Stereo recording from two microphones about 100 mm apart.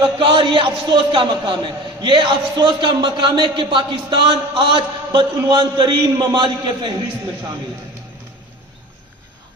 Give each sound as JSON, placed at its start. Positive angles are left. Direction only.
{"t": 0.0, "sound": "a man's voice", "side_deg": -55}